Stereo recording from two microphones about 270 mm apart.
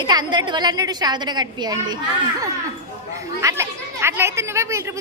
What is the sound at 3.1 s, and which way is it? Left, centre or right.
A woman's voice, centre.